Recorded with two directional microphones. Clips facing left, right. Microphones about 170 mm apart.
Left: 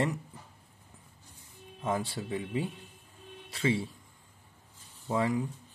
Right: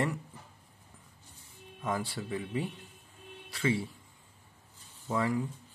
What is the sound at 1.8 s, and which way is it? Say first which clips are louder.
Speech: left 2 dB; 25° left (ahead or behind).